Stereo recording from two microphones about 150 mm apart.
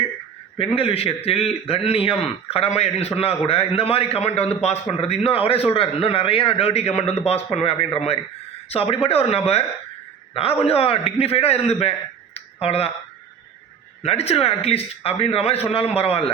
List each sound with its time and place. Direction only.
0.8 s a man's voice: 40° left (ahead or behind)
10.6 s a man's voice: 40° left (ahead or behind)
14.0 s a man's voice: 45° left (ahead or behind)